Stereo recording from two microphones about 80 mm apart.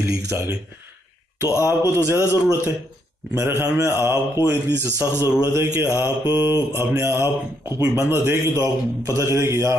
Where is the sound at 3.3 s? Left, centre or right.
Right.